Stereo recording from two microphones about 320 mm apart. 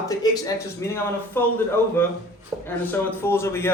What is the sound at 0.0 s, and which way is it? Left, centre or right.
A man's voice, centre.